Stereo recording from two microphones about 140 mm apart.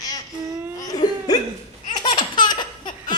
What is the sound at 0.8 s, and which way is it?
Cough, 25° left (ahead or behind).